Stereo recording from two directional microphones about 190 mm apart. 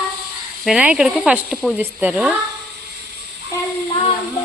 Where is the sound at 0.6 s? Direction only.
5° right (ahead or behind).